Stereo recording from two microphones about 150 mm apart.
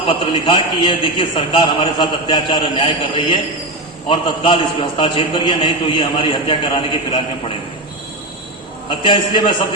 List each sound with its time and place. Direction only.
0.1 s a man's voice: 35° left (ahead or behind)
8.9 s a man's voice: 35° left (ahead or behind)